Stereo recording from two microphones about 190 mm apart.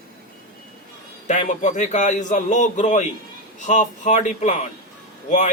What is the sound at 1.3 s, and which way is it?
Speech, 40° left (ahead or behind).